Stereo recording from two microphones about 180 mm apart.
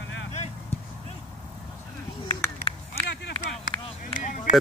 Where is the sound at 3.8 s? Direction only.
45° left (ahead or behind).